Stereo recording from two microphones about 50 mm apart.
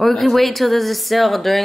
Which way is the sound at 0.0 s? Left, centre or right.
Centre.